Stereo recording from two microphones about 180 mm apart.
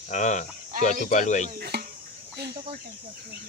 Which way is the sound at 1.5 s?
60° right (ahead or behind).